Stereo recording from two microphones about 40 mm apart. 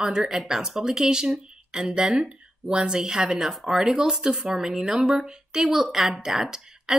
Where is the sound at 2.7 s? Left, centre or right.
Right.